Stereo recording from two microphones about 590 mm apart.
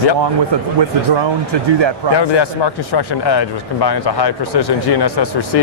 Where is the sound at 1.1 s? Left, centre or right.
Right.